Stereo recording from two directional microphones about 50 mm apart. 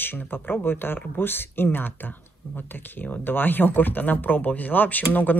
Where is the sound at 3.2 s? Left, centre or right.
Left.